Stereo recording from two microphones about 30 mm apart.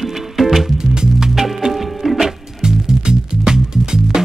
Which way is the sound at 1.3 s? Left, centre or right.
Centre.